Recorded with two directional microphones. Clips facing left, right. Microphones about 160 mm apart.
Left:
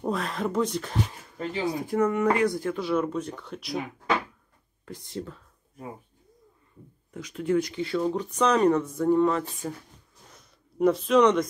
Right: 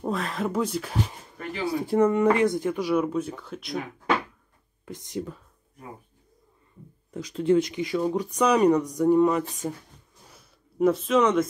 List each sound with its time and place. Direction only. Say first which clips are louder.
0.0 s speech: even; centre (ahead or behind)
1.9 s speech: right 4 dB; 30° right (ahead or behind); by 3.8 s centre (ahead or behind)
4.8 s speech: right 3 dB; 15° right (ahead or behind)
7.2 s speech: right 4 dB; 30° right (ahead or behind); by 9.7 s 15° right (ahead or behind)
10.2 s a sound: left 1 dB; 5° right (ahead or behind)